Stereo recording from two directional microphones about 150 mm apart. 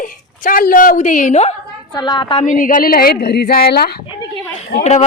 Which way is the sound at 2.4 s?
60° left (ahead or behind).